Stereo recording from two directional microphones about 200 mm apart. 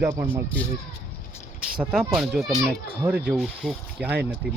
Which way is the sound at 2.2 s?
Centre (ahead or behind).